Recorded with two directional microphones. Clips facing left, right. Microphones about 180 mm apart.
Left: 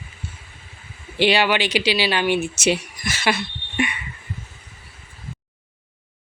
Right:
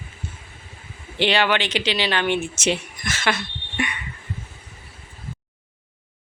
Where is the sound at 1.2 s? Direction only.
10° left (ahead or behind).